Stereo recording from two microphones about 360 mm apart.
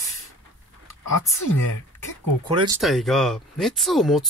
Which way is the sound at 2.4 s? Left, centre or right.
Centre.